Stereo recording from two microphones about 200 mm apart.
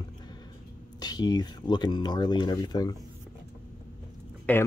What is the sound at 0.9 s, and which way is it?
Speech, 20° left (ahead or behind).